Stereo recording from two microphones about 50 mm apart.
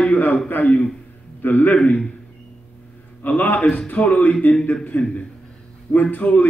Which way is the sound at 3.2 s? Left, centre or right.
Left.